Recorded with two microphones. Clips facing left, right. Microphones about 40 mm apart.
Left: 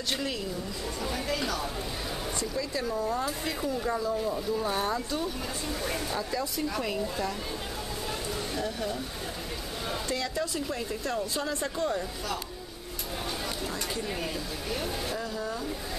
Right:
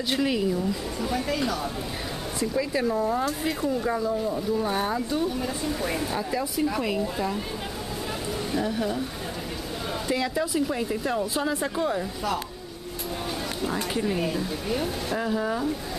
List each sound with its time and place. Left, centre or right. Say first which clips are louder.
0.1 s speech: right 8 dB; centre
1.0 s speech: right 5 dB; centre
2.4 s speech: right 9 dB; right
8.5 s speech: right 8 dB; centre
10.0 s speech: right 7 dB; centre
14.0 s speech: right 7 dB; centre
15.1 s speech: right 7 dB; right